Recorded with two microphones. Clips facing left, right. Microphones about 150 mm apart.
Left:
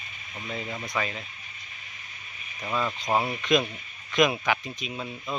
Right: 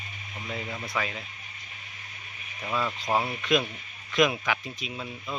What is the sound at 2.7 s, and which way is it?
Speech, 5° left (ahead or behind).